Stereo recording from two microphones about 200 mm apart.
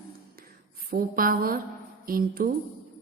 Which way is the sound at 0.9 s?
45° right (ahead or behind).